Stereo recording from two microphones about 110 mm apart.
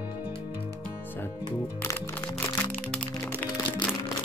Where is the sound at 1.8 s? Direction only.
20° left (ahead or behind).